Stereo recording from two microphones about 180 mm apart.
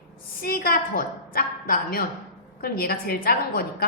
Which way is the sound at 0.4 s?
55° left (ahead or behind).